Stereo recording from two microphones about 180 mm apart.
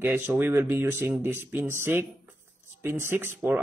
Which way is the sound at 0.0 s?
10° right (ahead or behind).